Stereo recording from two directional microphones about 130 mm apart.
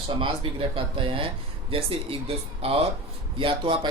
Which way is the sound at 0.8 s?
40° right (ahead or behind).